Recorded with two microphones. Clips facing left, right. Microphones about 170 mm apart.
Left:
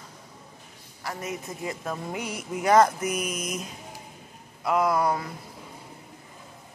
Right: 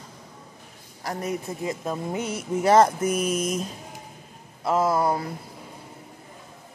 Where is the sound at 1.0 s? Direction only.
35° right (ahead or behind).